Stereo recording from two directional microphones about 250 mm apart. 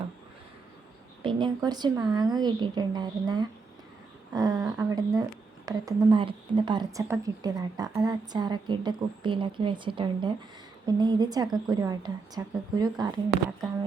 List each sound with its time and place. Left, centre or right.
1.2 s a woman's voice: centre